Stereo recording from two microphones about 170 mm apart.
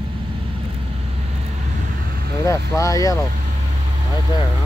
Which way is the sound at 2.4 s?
20° left (ahead or behind).